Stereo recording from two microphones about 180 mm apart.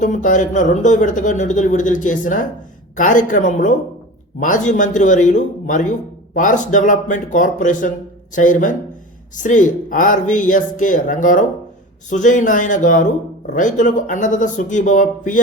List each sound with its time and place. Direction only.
0.0 s speech: 45° left (ahead or behind)